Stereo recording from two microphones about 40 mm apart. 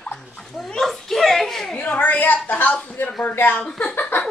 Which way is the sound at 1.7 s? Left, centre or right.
Left.